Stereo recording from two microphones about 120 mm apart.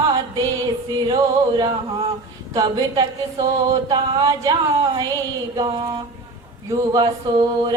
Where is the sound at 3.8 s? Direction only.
35° right (ahead or behind).